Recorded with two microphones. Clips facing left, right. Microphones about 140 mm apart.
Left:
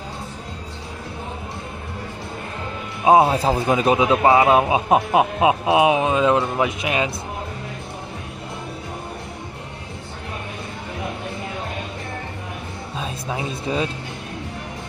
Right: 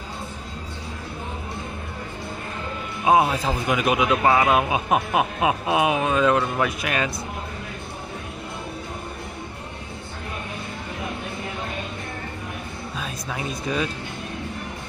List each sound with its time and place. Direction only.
3.1 s a man's voice: 30° left (ahead or behind)
12.9 s music: 25° left (ahead or behind)